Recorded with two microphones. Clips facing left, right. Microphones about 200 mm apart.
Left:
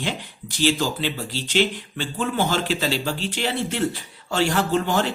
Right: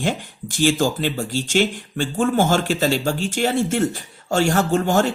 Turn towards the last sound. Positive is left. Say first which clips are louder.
# right 3 dB
turn(degrees=-45)  # may be behind; listen again after turning